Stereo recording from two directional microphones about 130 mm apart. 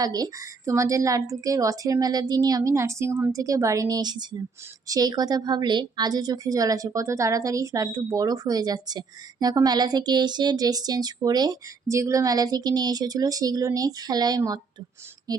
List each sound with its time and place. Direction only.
0.0 s speech: 30° right (ahead or behind)